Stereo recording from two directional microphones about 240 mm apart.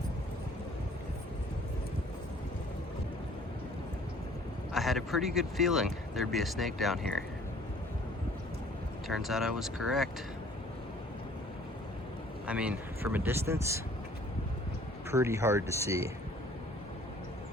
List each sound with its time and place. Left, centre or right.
4.7 s speech: centre
9.0 s speech: centre
12.5 s speech: centre
15.1 s speech: centre